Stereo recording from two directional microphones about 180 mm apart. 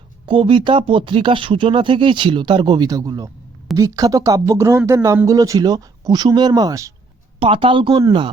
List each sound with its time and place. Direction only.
0.3 s speech: 30° right (ahead or behind)
7.3 s speech: 30° right (ahead or behind)